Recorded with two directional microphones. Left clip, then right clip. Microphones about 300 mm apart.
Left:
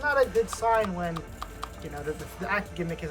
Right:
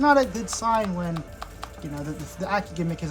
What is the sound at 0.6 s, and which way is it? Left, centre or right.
Speech, centre.